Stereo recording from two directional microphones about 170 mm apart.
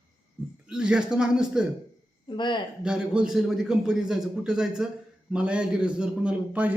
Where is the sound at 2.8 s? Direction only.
5° right (ahead or behind).